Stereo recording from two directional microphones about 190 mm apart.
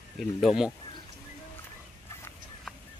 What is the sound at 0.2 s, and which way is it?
Speech, centre (ahead or behind).